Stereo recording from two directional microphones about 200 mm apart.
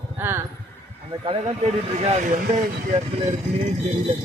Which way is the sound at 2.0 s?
35° right (ahead or behind).